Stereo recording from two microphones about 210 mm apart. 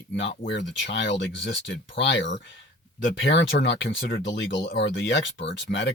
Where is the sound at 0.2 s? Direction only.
55° left (ahead or behind).